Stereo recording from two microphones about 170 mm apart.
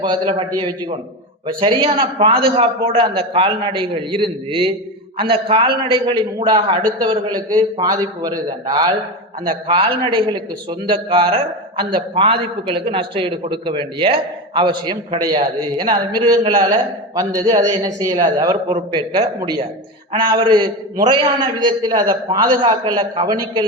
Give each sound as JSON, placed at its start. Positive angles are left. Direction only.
{"t": 0.0, "sound": "a man's voice", "side_deg": -30}